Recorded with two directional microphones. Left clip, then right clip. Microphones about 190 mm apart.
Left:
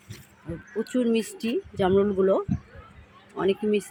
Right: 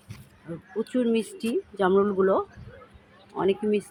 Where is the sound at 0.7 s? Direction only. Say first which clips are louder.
Even; 5° left (ahead or behind).